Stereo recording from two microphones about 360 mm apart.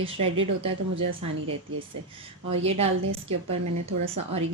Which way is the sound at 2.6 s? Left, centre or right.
Centre.